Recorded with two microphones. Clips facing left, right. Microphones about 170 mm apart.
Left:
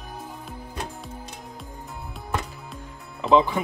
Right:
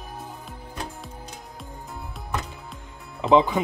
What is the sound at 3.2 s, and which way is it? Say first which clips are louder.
Speech: right 1 dB; 20° right (ahead or behind).